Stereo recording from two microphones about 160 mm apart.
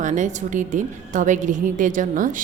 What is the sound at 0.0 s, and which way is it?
A woman's voice, 50° right (ahead or behind).